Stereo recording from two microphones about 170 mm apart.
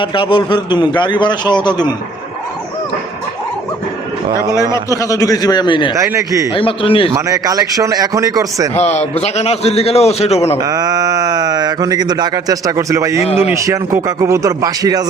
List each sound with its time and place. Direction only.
0.0 s a man's voice: 30° left (ahead or behind)
4.7 s a man's voice: 20° left (ahead or behind)
6.0 s a man's voice: 15° right (ahead or behind)
6.5 s a man's voice: 30° left (ahead or behind)
7.1 s speech: 20° right (ahead or behind)
8.8 s a man's voice: 40° left (ahead or behind)
10.6 s speech: 20° right (ahead or behind)